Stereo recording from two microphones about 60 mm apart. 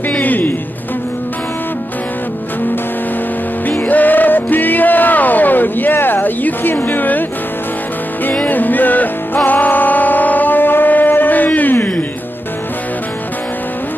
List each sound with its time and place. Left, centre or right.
0.2 s music: left
3.8 s music: left
8.5 s music: left
9.5 s a sound: left